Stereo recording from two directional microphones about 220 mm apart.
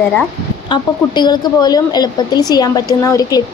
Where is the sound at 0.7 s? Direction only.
20° left (ahead or behind).